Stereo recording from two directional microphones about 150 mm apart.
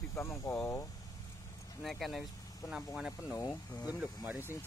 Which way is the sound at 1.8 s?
Centre (ahead or behind).